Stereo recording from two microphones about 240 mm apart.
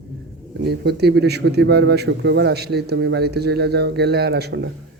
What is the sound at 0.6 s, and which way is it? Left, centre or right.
A man's voice, right.